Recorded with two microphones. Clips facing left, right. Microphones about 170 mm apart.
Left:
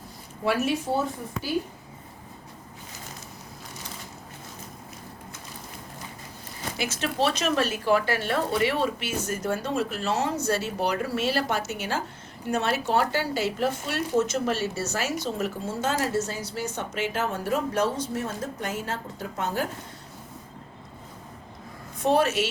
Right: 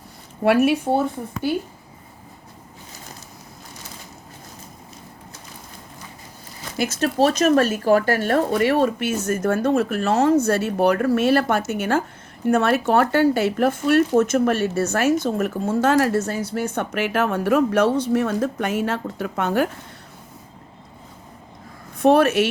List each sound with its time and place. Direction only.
0.4 s speech: 65° right (ahead or behind)
6.7 s speech: 40° right (ahead or behind); by 19.6 s 65° right (ahead or behind)
21.9 s speech: 60° right (ahead or behind)